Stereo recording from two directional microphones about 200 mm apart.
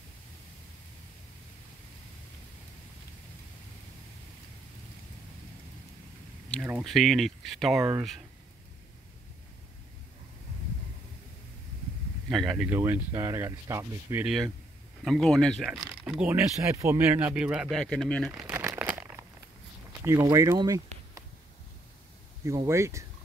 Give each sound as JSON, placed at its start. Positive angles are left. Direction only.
{"t": 6.6, "sound": "speech", "side_deg": -5}
{"t": 12.3, "sound": "speech", "side_deg": 0}
{"t": 14.2, "sound": "speech", "side_deg": 0}
{"t": 18.3, "sound": "crumpling", "side_deg": -10}
{"t": 20.0, "sound": "speech", "side_deg": -15}
{"t": 22.4, "sound": "speech", "side_deg": -15}